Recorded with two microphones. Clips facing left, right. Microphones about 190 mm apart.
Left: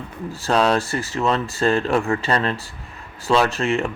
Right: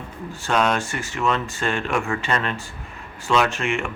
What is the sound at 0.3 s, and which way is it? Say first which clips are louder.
A man's voice: left 3 dB; 35° left (ahead or behind).